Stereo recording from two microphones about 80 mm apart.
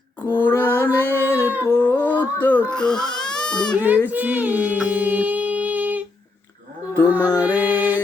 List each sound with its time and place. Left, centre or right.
0.3 s female singing: left
0.9 s a sound: right
1.7 s music: left
2.6 s speech: centre
3.2 s baby cry: centre
3.8 s speech: right
4.9 s humming: right
6.9 s mantra: right
7.3 s music: centre